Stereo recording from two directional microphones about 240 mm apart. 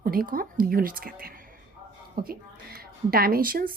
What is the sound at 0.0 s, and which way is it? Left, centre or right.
Speech, right.